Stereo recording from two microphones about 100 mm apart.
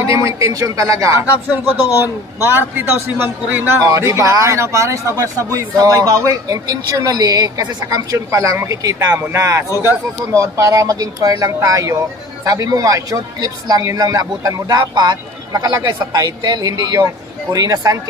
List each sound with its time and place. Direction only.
0.0 s speech: 35° right (ahead or behind)
2.4 s a man's voice: 25° right (ahead or behind)
3.8 s speech: 35° right (ahead or behind)